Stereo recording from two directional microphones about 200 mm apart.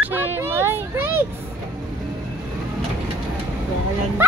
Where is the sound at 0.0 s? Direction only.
10° right (ahead or behind).